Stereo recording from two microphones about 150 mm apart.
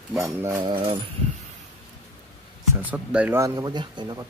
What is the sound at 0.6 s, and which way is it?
Speech, 30° right (ahead or behind).